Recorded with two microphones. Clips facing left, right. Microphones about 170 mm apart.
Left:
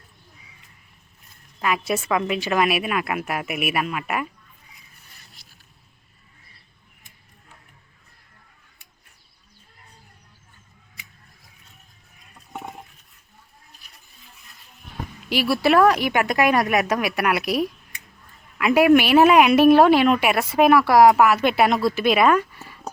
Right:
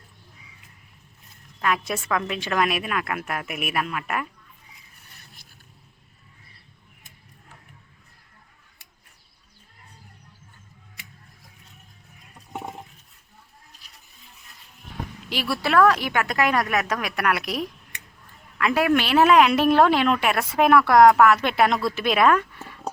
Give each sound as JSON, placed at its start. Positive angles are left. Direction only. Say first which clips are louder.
{"t": 1.6, "sound": "a woman's voice", "louder": "left 2 dB", "side_deg": 5}
{"t": 5.2, "sound": "vehicle", "louder": "right 2 dB", "side_deg": -50}
{"t": 15.3, "sound": "a woman's voice", "louder": "left 6 dB", "side_deg": 10}